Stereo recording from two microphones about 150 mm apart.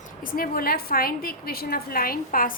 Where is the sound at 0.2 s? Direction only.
70° left (ahead or behind).